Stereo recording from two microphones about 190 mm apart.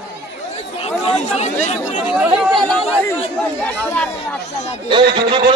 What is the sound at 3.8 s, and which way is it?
Speech, 10° left (ahead or behind).